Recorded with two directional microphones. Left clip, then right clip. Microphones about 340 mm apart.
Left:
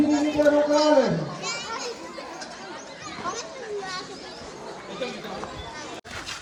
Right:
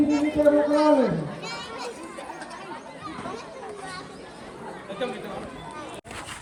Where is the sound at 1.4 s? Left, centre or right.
Centre.